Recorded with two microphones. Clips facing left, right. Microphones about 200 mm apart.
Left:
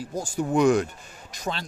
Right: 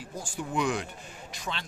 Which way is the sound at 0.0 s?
40° left (ahead or behind).